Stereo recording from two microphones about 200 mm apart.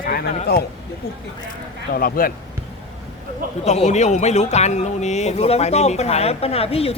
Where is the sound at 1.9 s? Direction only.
45° left (ahead or behind).